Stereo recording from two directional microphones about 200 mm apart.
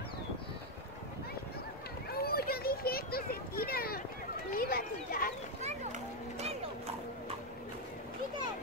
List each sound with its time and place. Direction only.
2.0 s children playing: 50° left (ahead or behind)
4.5 s speech: 45° left (ahead or behind)
5.6 s a sound: 35° right (ahead or behind)